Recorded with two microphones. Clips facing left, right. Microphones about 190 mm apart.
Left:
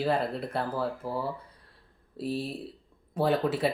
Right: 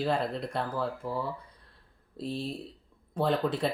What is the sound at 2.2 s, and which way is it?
Speech, 10° left (ahead or behind).